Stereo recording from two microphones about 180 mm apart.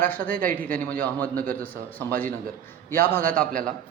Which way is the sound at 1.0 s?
10° left (ahead or behind).